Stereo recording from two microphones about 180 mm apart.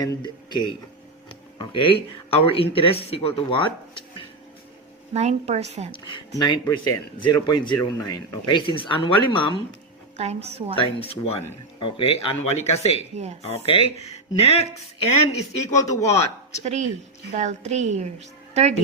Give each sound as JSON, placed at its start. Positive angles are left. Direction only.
{"t": 0.0, "sound": "speech", "side_deg": 20}
{"t": 5.1, "sound": "a woman's voice", "side_deg": -35}
{"t": 6.4, "sound": "speech", "side_deg": 25}
{"t": 10.2, "sound": "a woman's voice", "side_deg": -35}
{"t": 11.1, "sound": "speech", "side_deg": 35}
{"t": 13.0, "sound": "a woman's voice", "side_deg": -35}
{"t": 13.4, "sound": "speech", "side_deg": 35}
{"t": 15.6, "sound": "speech", "side_deg": 20}
{"t": 16.0, "sound": "speech", "side_deg": 35}
{"t": 17.3, "sound": "a woman's voice", "side_deg": -40}